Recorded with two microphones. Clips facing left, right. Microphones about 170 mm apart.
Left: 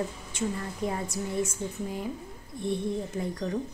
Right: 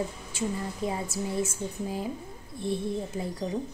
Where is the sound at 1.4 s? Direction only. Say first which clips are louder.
Even; 30° right (ahead or behind).